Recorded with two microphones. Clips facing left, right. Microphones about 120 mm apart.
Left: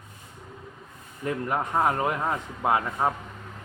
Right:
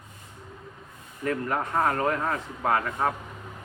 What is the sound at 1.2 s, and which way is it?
Speech, 15° left (ahead or behind).